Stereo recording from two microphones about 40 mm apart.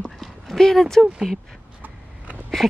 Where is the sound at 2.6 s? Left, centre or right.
Centre.